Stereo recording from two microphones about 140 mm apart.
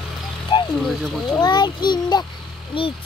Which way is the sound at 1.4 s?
30° left (ahead or behind).